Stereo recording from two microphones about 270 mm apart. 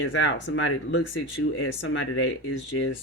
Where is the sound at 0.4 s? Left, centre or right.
Left.